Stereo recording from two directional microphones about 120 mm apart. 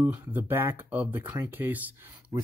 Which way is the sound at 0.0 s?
15° right (ahead or behind).